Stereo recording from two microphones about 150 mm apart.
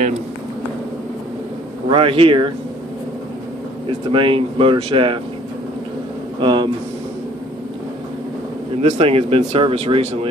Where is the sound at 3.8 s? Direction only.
35° right (ahead or behind).